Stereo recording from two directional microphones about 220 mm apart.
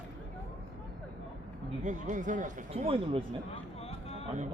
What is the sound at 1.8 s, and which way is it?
Speech, 35° right (ahead or behind).